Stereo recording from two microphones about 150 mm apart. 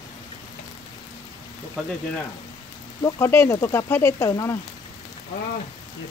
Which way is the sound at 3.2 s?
15° left (ahead or behind).